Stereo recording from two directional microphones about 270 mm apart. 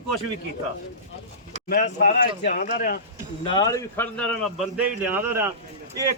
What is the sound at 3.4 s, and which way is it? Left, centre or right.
Speech, centre.